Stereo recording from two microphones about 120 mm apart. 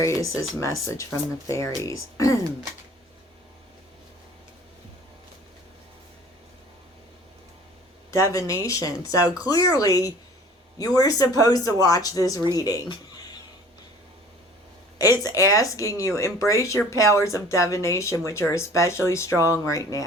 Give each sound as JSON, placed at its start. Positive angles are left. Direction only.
{"t": 0.0, "sound": "speech", "side_deg": 25}
{"t": 8.1, "sound": "speech", "side_deg": 25}
{"t": 14.9, "sound": "speech", "side_deg": 30}